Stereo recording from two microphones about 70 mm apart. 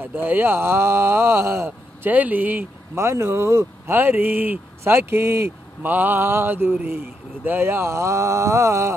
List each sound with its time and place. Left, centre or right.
0.0 s speech: right
2.0 s speech: right
3.0 s speech: right
5.9 s mantra: right
6.7 s speech: right